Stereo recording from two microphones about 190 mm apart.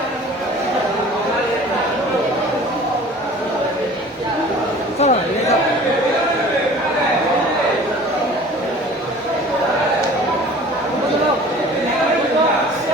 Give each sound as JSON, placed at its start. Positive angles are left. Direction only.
{"t": 4.9, "sound": "chatter", "side_deg": 35}